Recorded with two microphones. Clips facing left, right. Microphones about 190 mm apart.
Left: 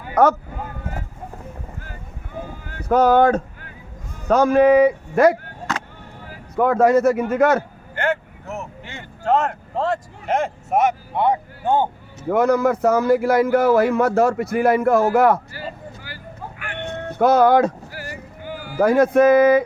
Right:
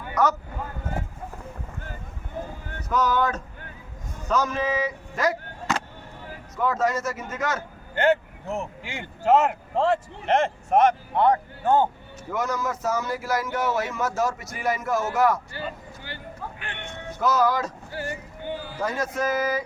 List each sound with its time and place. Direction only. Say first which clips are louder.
0.1 s speech: left 7 dB; 55° left (ahead or behind)
2.9 s speech: left 9 dB; 55° left (ahead or behind)
6.6 s speech: left 10 dB; 60° left (ahead or behind)
8.8 s speech: right 1 dB; 10° right (ahead or behind); by 11.9 s 15° left (ahead or behind)
12.3 s speech: left 11 dB; 60° left (ahead or behind)
16.0 s vehicle: right 4 dB; 25° right (ahead or behind)
17.1 s speech: left 8 dB; 60° left (ahead or behind)
18.4 s music: even; 25° right (ahead or behind)
18.8 s speech: left 14 dB; 60° left (ahead or behind)